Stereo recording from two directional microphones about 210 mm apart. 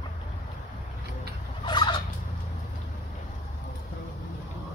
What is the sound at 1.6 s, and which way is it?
Turkey, 20° left (ahead or behind).